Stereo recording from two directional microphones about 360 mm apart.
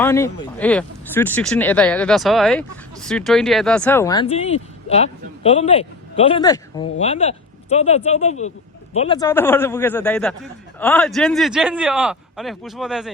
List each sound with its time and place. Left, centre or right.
0.0 s speech: centre